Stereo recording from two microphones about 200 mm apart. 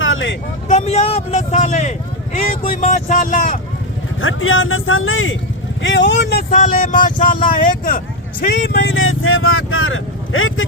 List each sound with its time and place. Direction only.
0.0 s vehicle: 75° left (ahead or behind)
0.7 s a man's voice: 30° left (ahead or behind)
4.2 s speech: 85° left
5.8 s speech: 65° left (ahead or behind)
6.5 s speech: 40° left (ahead or behind); by 10.7 s 90° left